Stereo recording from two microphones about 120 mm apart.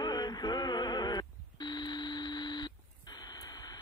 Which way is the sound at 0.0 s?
35° left (ahead or behind).